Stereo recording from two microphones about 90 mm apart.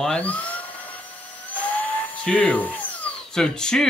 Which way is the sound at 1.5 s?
15° left (ahead or behind).